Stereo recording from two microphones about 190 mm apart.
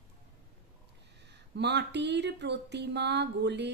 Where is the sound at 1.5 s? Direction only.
65° right (ahead or behind).